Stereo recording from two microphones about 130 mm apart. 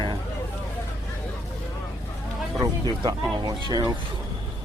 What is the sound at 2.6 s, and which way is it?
Speech, 30° right (ahead or behind).